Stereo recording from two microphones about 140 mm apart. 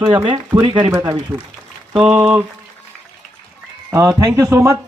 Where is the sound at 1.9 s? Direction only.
10° right (ahead or behind).